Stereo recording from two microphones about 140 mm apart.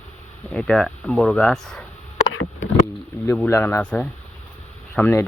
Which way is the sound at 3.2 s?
15° left (ahead or behind).